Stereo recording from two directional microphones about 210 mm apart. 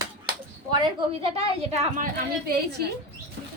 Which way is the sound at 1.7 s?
30° right (ahead or behind).